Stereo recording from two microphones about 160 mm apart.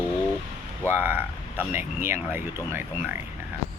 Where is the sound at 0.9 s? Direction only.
15° right (ahead or behind).